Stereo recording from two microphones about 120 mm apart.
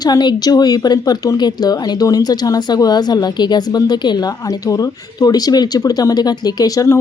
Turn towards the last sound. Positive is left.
turn(degrees=30)  # may be behind; listen again after turning